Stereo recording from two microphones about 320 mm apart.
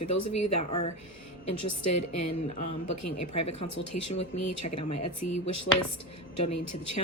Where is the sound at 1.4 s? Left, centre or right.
Left.